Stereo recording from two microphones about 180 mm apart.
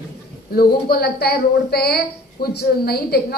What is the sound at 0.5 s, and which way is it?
A woman's voice, 60° left (ahead or behind).